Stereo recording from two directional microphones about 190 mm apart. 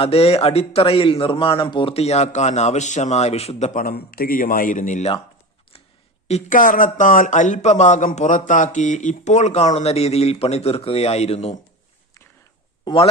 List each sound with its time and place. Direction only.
0.0 s speech: 30° left (ahead or behind)
6.2 s speech: 40° left (ahead or behind)
12.8 s speech: 25° left (ahead or behind)